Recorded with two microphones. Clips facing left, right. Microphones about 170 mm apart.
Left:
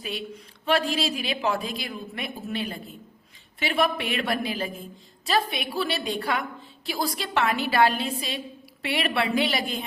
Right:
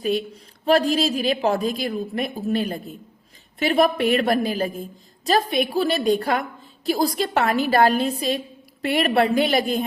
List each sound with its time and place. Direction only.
0.0 s a man's voice: 40° right (ahead or behind)